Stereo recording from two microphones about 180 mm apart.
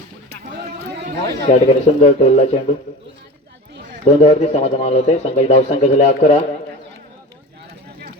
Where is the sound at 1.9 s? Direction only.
35° left (ahead or behind).